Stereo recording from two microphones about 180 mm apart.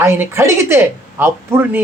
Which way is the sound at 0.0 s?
15° right (ahead or behind).